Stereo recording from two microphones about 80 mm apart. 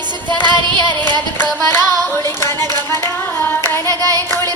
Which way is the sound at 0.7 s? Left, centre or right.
Right.